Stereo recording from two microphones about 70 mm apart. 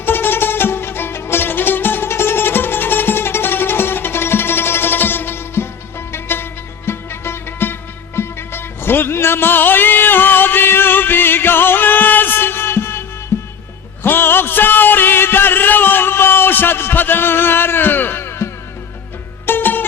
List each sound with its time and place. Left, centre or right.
0.0 s music: left